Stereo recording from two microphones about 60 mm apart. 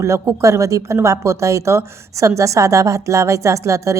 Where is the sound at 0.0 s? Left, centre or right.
Right.